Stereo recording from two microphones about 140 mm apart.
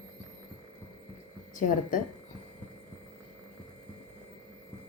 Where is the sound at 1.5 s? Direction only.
70° left (ahead or behind).